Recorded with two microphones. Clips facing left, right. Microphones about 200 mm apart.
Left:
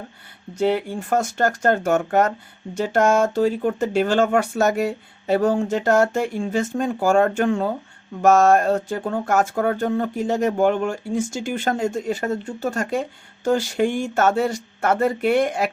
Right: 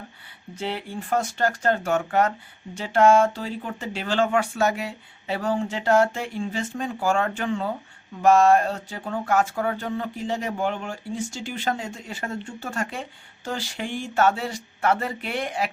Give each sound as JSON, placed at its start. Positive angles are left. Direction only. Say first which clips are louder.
{"t": 0.5, "sound": "speech", "louder": "left 9 dB", "side_deg": 45}